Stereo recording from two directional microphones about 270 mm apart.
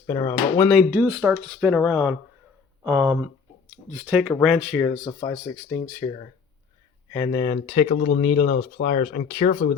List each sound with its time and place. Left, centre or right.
0.1 s speech: centre
0.9 s speech: centre; by 9.6 s left